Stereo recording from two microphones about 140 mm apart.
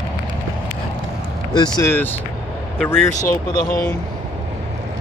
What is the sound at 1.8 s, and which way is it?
Speech, 15° left (ahead or behind).